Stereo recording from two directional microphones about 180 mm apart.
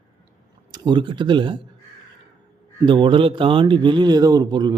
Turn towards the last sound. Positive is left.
turn(degrees=-25)  # may be behind; listen again after turning